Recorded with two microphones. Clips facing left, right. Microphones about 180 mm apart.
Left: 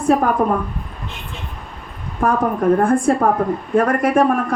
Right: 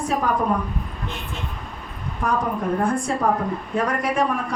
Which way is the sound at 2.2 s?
50° left (ahead or behind).